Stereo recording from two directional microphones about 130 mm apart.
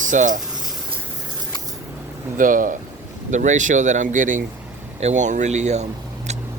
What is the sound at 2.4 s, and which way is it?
Speech, 90° right.